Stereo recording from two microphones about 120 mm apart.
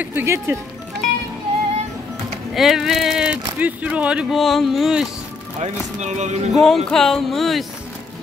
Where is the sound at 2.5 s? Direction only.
Centre (ahead or behind).